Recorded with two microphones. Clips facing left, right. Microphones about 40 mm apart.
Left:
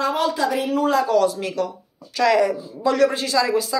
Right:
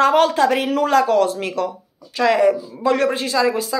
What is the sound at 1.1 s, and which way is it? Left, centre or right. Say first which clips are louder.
Speech: right 2 dB; right.